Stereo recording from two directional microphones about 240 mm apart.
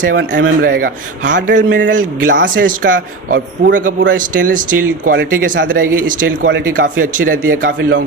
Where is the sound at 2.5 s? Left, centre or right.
Right.